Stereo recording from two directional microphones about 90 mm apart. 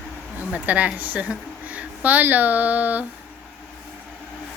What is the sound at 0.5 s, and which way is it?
A woman's voice, 15° right (ahead or behind).